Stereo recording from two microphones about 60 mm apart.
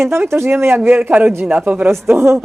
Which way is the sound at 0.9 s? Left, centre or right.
Right.